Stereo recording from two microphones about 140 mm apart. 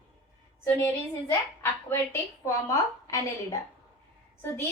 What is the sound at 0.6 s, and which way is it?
A woman's voice, 15° left (ahead or behind).